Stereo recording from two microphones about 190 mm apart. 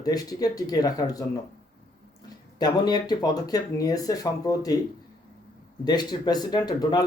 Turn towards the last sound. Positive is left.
turn(degrees=20)  # may be behind; listen again after turning